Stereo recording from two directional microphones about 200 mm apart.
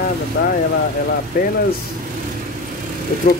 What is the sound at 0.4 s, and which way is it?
Speech, 50° left (ahead or behind).